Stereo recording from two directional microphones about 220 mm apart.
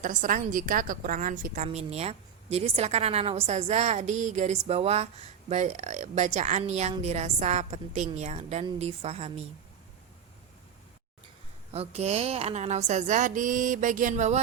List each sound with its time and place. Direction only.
0.0 s a woman's voice: 35° right (ahead or behind)
11.7 s a woman's voice: 30° right (ahead or behind)